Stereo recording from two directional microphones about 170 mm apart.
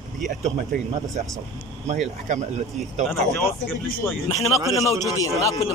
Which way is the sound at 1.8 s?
45° right (ahead or behind).